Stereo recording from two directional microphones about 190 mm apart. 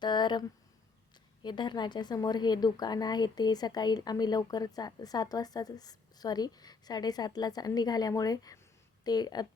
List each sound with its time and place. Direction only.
0.0 s a woman's voice: 25° left (ahead or behind)